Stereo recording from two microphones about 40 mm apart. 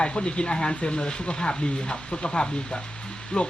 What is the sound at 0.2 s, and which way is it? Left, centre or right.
Speech, left.